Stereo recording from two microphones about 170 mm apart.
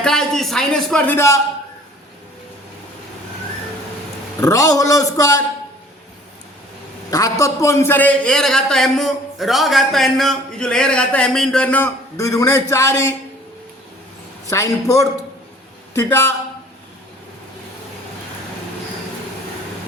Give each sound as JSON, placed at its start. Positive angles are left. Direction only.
{"t": 0.0, "sound": "a man's voice", "side_deg": 5}
{"t": 4.4, "sound": "speech", "side_deg": 20}
{"t": 7.1, "sound": "a man's voice", "side_deg": 20}
{"t": 14.5, "sound": "a man's voice", "side_deg": 20}